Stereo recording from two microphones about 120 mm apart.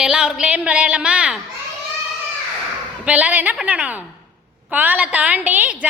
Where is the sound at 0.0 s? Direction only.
5° right (ahead or behind).